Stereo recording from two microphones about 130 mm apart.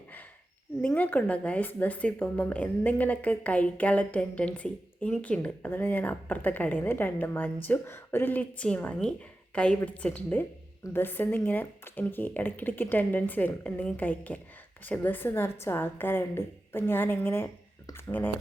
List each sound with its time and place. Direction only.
0.8 s speech: 10° left (ahead or behind)